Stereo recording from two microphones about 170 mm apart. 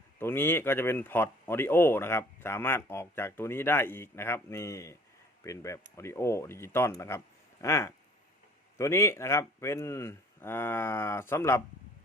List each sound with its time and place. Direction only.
0.2 s speech: 15° left (ahead or behind)